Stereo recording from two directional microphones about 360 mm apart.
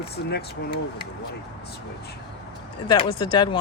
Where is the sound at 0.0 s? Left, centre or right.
Left.